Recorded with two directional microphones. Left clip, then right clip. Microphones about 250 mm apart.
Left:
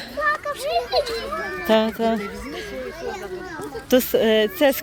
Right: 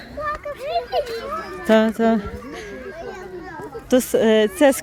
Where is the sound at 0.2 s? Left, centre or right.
Left.